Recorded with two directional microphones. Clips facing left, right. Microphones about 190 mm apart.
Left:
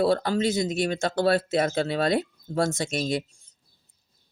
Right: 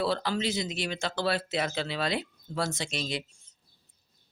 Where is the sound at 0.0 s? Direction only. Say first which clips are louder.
Left 6 dB; 45° left (ahead or behind).